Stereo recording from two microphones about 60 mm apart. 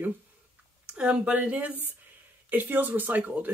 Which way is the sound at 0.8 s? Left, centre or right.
Centre.